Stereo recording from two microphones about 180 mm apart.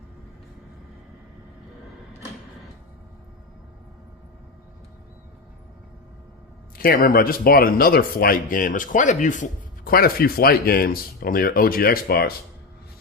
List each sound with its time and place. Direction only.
6.7 s speech: 55° left (ahead or behind)